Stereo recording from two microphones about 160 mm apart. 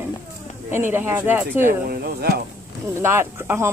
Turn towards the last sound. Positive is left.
turn(degrees=-15)  # may be behind; listen again after turning